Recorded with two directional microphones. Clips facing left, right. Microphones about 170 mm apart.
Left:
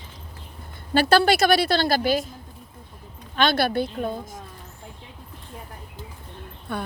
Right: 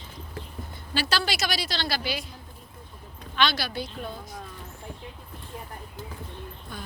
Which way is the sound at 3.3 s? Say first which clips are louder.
Left 6 dB; 50° left (ahead or behind).